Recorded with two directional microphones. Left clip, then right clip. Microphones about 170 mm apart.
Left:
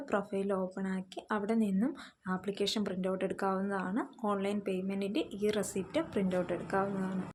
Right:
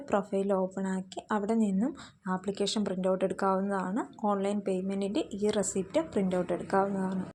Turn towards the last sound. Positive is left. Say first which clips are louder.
# right 4 dB
turn(degrees=-15)  # may be behind; listen again after turning